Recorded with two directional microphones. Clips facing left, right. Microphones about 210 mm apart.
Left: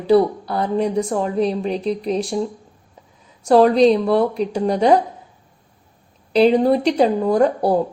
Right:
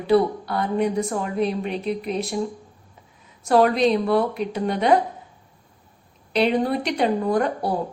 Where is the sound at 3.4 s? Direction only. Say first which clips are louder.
Left 5 dB; 30° left (ahead or behind).